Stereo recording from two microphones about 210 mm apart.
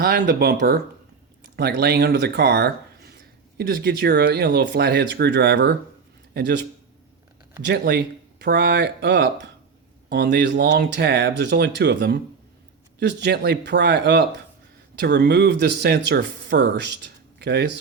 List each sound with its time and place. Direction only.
0.0 s speech: 50° right (ahead or behind)